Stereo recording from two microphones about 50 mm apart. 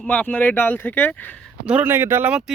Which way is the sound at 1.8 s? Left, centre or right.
Right.